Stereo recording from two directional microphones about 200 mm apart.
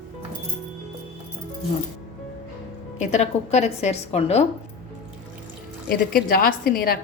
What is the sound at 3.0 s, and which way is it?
A woman's voice, 35° left (ahead or behind).